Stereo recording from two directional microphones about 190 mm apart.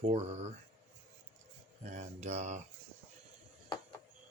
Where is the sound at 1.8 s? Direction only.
40° right (ahead or behind).